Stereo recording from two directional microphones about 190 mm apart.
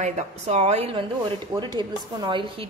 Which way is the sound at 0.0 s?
35° right (ahead or behind).